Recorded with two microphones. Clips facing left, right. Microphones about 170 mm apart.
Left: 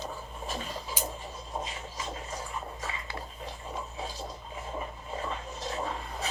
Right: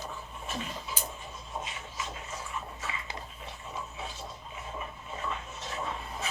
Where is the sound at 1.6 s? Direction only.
35° left (ahead or behind).